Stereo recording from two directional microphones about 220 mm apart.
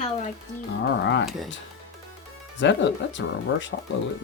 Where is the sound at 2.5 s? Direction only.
55° left (ahead or behind).